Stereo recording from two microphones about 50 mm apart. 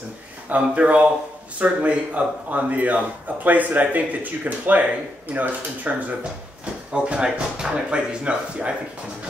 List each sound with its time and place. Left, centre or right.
0.5 s a man's voice: right
6.6 s speech: right